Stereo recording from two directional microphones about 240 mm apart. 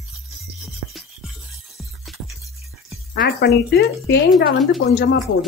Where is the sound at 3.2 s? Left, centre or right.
Left.